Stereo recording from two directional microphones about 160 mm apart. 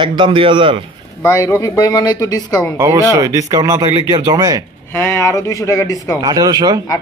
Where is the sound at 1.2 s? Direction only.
15° left (ahead or behind).